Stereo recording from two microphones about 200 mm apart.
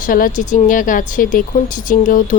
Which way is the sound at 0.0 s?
45° left (ahead or behind).